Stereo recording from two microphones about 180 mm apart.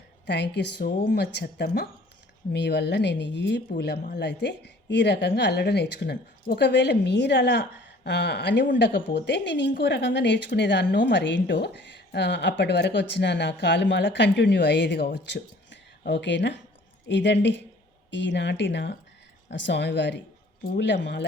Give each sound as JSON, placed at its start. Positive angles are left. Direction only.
{"t": 0.3, "sound": "a woman's voice", "side_deg": 75}